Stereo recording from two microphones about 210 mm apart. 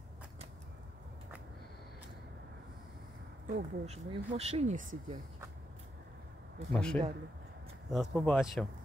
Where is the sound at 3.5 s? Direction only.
30° right (ahead or behind).